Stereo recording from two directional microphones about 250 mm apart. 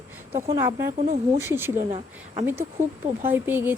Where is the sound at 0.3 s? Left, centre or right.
Right.